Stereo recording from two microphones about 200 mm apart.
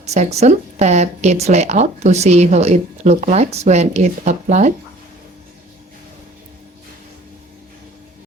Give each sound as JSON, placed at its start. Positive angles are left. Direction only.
{"t": 0.0, "sound": "speech", "side_deg": -35}